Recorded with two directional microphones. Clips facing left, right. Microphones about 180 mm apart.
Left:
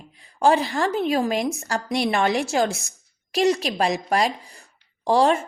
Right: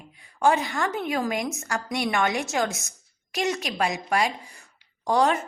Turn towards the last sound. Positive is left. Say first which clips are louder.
# left 3 dB
turn(degrees=30)  # may be behind; listen again after turning